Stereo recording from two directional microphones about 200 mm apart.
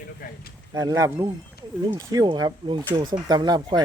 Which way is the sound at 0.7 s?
15° right (ahead or behind).